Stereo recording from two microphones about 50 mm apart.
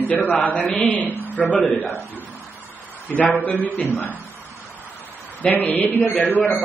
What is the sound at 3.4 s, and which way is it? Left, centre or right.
Speech, left.